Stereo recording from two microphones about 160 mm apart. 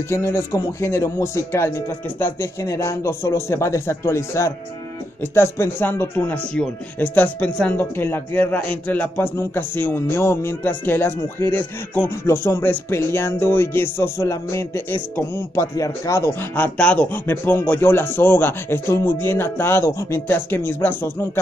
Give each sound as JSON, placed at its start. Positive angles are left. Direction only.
{"t": 0.1, "sound": "speech", "side_deg": 15}